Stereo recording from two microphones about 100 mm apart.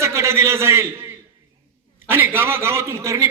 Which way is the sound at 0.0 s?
30° right (ahead or behind).